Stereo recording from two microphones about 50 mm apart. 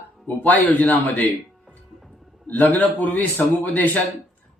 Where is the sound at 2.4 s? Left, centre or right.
Left.